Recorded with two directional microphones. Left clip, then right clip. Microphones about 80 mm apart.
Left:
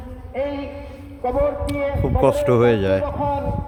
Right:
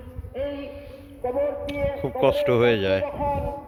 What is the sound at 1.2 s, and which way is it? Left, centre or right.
A man's voice, left.